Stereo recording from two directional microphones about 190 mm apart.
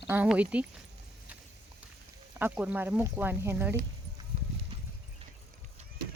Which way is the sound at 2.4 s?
10° right (ahead or behind).